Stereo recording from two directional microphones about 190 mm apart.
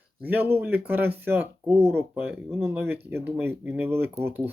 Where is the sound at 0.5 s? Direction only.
10° right (ahead or behind).